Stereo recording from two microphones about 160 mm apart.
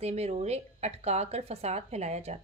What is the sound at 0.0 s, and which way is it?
A woman's voice, 40° right (ahead or behind).